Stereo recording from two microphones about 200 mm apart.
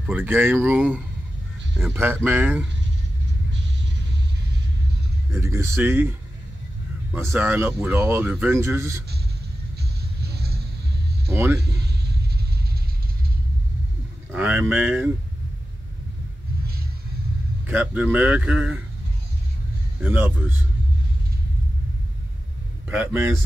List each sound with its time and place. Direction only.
0.0 s speech: 10° right (ahead or behind)
2.2 s speech: 10° right (ahead or behind)
3.5 s music: 60° right (ahead or behind)
5.3 s speech: 15° right (ahead or behind)
7.1 s speech: 10° right (ahead or behind)
10.2 s a sound: 55° right (ahead or behind)
11.2 s a sound: 15° right (ahead or behind)
11.6 s a sound: 55° right (ahead or behind)
14.3 s speech: 10° right (ahead or behind)
17.6 s speech: 10° right (ahead or behind)
20.0 s speech: 10° right (ahead or behind)
22.8 s speech: 10° right (ahead or behind)